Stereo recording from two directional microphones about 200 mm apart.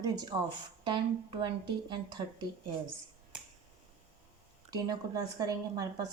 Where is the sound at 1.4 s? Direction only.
20° right (ahead or behind).